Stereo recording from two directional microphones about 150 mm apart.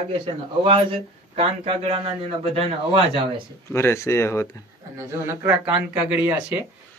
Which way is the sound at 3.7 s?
15° left (ahead or behind).